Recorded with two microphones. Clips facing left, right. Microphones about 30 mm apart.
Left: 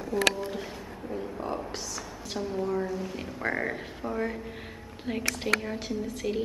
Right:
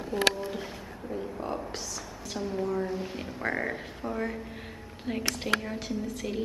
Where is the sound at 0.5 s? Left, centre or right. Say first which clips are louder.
Left 1 dB; centre.